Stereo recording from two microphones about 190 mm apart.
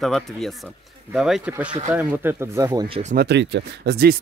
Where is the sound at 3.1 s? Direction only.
65° right (ahead or behind).